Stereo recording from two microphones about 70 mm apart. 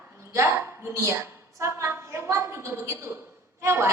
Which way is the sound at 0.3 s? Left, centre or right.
Right.